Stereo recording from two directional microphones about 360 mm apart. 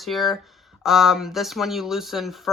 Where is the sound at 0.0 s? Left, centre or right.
Centre.